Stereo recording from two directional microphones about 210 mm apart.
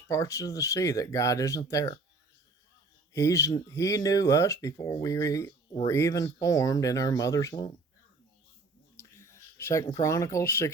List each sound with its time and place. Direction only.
0.1 s speech: 15° left (ahead or behind)
3.1 s speech: 15° left (ahead or behind)
9.0 s a sound: 15° left (ahead or behind)